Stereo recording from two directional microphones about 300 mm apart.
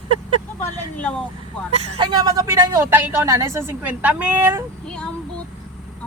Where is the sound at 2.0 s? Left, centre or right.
Centre.